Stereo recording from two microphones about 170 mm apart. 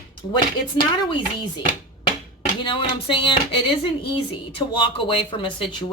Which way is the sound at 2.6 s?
30° left (ahead or behind).